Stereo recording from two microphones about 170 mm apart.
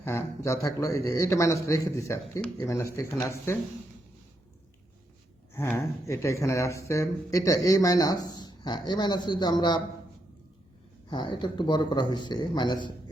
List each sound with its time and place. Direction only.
0.0 s a man's voice: 15° left (ahead or behind)
5.5 s speech: 15° left (ahead or behind)
11.1 s speech: 25° left (ahead or behind)